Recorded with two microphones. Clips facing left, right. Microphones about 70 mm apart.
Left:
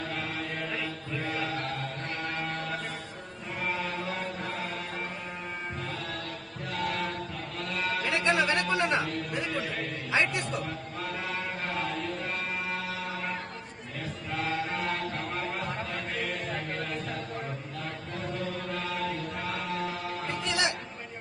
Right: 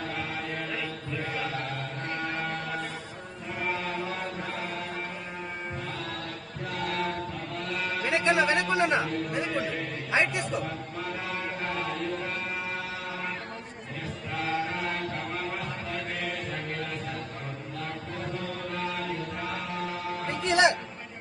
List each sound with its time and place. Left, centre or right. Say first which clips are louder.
0.4 s chant: right 1 dB; centre
6.8 s chant: right 1 dB; centre
9.3 s a man's voice: right 3 dB; centre
11.3 s a sound: right 1 dB; centre
14.0 s chant: even; centre
18.1 s chant: left 2 dB; centre
20.4 s a sound: right 8 dB; right